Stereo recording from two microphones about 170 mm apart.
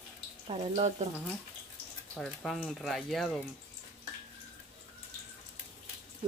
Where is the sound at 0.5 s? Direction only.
40° right (ahead or behind).